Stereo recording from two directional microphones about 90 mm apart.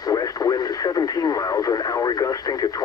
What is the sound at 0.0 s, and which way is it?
Speech, 40° left (ahead or behind).